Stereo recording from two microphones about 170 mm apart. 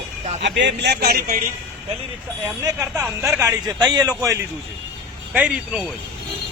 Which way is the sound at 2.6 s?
20° right (ahead or behind).